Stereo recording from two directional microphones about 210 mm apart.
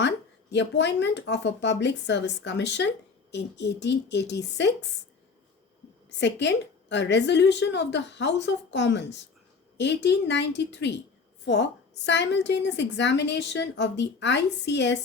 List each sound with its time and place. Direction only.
0.5 s a woman's voice: 55° left (ahead or behind)
6.1 s a woman's voice: 55° left (ahead or behind)
12.0 s a woman's voice: 55° left (ahead or behind)